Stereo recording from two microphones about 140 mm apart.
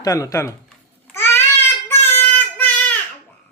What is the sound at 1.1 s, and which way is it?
Babbling, 15° left (ahead or behind).